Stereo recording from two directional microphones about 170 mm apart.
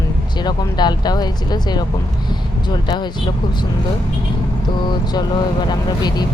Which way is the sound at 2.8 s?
25° left (ahead or behind).